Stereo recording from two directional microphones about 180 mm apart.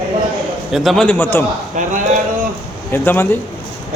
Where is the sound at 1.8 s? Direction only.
45° right (ahead or behind).